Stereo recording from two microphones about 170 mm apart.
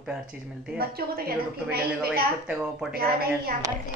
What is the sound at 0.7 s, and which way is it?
Speech, 65° right (ahead or behind).